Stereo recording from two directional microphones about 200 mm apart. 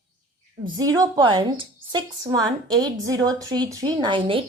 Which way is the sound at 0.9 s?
20° right (ahead or behind).